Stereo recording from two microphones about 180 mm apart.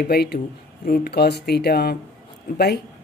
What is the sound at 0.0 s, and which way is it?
Speech, 60° left (ahead or behind).